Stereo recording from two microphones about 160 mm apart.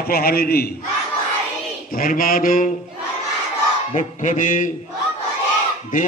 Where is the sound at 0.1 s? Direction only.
70° left (ahead or behind).